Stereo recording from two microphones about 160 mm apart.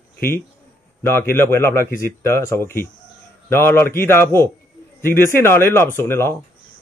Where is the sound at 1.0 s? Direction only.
15° left (ahead or behind).